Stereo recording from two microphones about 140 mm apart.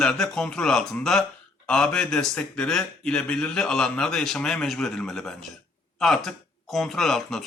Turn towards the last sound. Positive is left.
turn(degrees=0)  # may be behind; listen again after turning